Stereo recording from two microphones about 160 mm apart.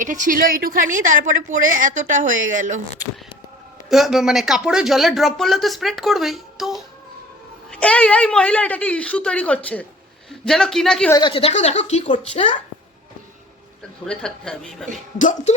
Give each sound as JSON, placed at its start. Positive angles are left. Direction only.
{"t": 0.0, "sound": "speech", "side_deg": -55}
{"t": 3.8, "sound": "a woman's voice", "side_deg": 0}
{"t": 11.1, "sound": "a woman's voice", "side_deg": 30}
{"t": 14.0, "sound": "speech", "side_deg": 5}
{"t": 15.2, "sound": "music", "side_deg": 55}